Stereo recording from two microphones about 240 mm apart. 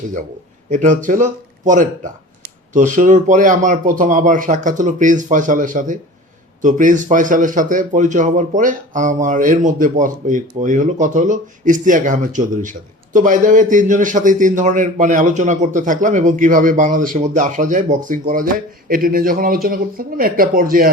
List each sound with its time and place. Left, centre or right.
0.7 s a man's voice: right